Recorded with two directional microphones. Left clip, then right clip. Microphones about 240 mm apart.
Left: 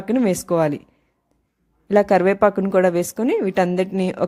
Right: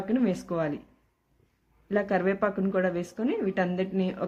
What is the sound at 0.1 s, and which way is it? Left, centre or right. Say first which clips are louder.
Speech: left 10 dB; left.